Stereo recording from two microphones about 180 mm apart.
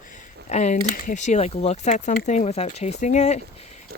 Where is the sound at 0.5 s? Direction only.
40° left (ahead or behind).